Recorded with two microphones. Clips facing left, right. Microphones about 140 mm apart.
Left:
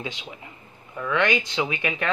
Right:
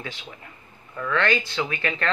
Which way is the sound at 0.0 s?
15° left (ahead or behind).